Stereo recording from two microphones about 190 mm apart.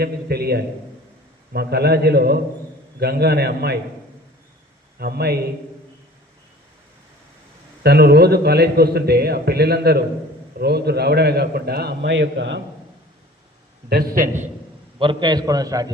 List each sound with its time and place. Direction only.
0.0 s a man's voice: 55° right (ahead or behind)
4.9 s a man's voice: 55° right (ahead or behind)
7.9 s a man's voice: 55° right (ahead or behind)
13.9 s a man's voice: 50° right (ahead or behind)
14.9 s a man's voice: 25° right (ahead or behind)